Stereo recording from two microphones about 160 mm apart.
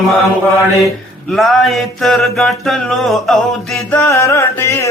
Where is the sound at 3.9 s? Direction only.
15° left (ahead or behind).